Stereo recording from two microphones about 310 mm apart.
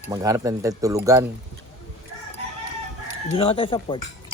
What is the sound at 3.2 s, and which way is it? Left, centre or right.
Speech, centre.